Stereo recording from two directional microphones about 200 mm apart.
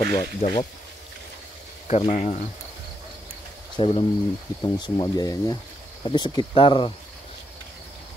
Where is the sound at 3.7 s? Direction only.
25° left (ahead or behind).